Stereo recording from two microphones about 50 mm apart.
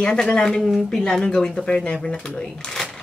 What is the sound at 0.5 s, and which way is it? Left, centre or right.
Speech, centre.